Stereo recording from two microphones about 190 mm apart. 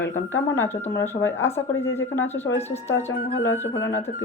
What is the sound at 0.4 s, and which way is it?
Speech, 10° left (ahead or behind).